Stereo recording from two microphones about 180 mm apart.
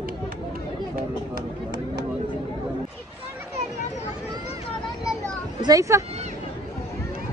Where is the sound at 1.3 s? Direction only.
70° right (ahead or behind).